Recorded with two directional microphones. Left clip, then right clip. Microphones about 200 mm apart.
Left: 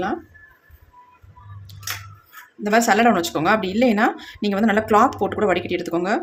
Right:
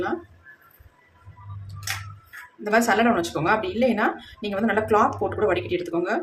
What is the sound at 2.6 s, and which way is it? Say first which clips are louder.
Speech: left 4 dB; 40° left (ahead or behind).